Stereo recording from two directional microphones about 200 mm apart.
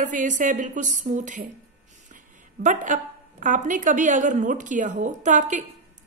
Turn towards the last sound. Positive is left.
turn(degrees=-40)  # may be behind; listen again after turning